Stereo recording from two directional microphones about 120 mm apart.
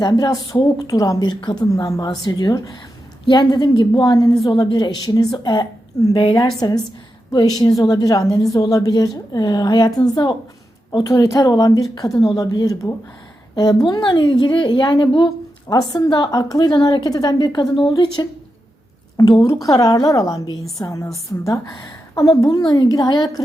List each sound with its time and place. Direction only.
0.0 s a woman's voice: 35° left (ahead or behind)
6.6 s a woman's voice: 35° left (ahead or behind)
11.1 s a woman's voice: 25° left (ahead or behind)